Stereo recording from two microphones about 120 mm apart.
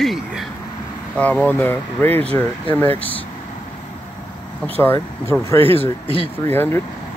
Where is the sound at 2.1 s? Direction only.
55° right (ahead or behind).